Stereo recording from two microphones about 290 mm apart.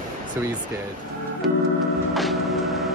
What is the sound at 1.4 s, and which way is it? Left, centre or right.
Organ, right.